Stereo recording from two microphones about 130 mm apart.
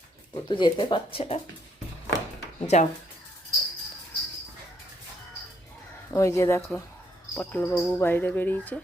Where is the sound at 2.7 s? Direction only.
60° left (ahead or behind).